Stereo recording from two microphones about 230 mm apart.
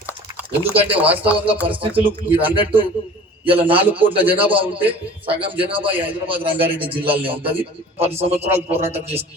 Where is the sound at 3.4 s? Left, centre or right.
Right.